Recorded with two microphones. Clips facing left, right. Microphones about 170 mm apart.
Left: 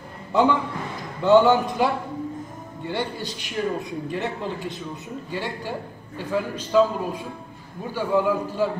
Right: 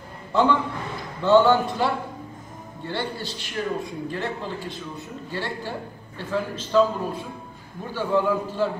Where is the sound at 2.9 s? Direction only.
15° left (ahead or behind).